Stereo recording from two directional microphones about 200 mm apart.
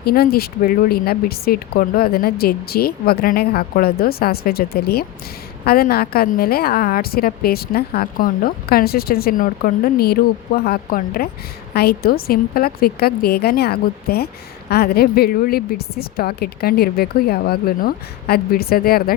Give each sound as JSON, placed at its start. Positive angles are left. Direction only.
{"t": 0.0, "sound": "a woman's voice", "side_deg": 50}